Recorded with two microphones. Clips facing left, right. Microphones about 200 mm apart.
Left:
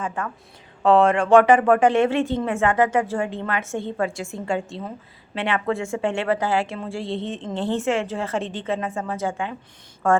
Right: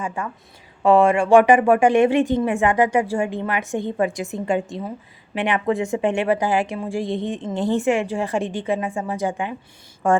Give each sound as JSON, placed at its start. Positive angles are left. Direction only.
{"t": 0.0, "sound": "a woman's voice", "side_deg": -10}